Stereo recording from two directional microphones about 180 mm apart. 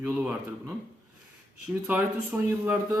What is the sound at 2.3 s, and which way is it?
Speech, 10° right (ahead or behind).